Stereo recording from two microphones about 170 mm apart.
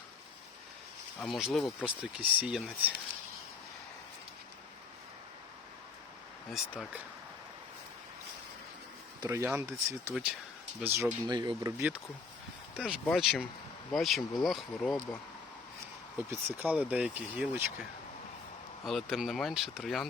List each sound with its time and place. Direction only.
1.2 s speech: centre (ahead or behind)
6.5 s speech: centre (ahead or behind)
9.2 s speech: 15° right (ahead or behind)
11.8 s speech: 5° right (ahead or behind)
16.1 s speech: 10° right (ahead or behind)
18.9 s speech: centre (ahead or behind)